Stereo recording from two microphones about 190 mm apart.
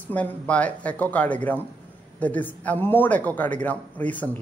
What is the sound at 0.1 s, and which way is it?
A woman's voice, 5° left (ahead or behind).